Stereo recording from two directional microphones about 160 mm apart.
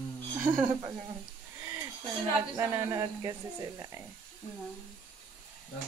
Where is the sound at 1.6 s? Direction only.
20° right (ahead or behind).